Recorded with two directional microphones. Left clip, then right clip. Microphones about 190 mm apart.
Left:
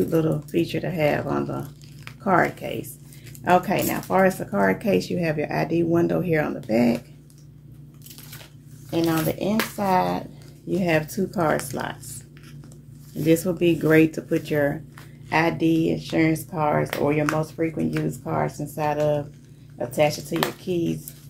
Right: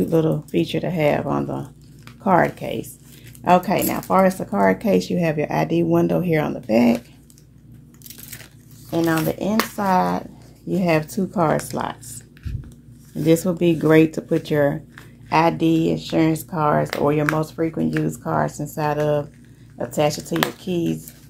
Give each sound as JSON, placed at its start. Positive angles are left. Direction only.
{"t": 0.0, "sound": "speech", "side_deg": -30}
{"t": 9.0, "sound": "speech", "side_deg": -45}
{"t": 9.4, "sound": "speech", "side_deg": -35}
{"t": 13.1, "sound": "speech", "side_deg": -30}